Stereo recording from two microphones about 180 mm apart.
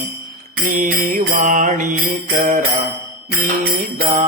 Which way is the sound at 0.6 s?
50° right (ahead or behind).